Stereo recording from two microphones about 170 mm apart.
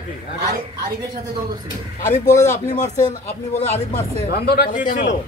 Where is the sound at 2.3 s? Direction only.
15° left (ahead or behind).